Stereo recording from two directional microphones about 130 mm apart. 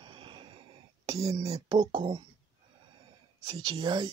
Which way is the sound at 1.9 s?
40° right (ahead or behind).